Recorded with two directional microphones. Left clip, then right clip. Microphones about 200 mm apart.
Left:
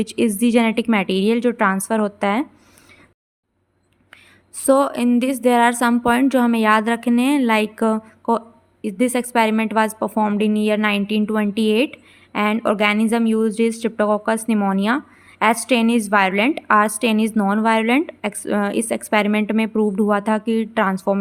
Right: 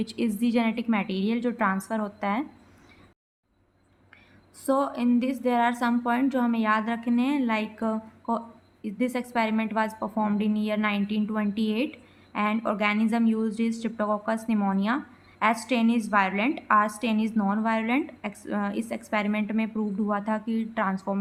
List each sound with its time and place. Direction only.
0.0 s a woman's voice: 35° left (ahead or behind)
4.6 s a woman's voice: 45° left (ahead or behind)